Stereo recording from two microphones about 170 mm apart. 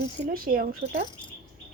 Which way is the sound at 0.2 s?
60° right (ahead or behind).